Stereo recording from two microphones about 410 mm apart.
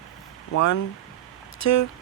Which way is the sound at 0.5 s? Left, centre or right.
Left.